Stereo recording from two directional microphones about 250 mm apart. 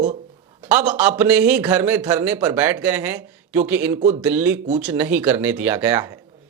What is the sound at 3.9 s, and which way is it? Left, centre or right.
Speech, right.